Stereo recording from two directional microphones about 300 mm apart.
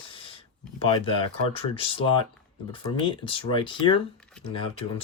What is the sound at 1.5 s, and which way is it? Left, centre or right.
Speech, centre.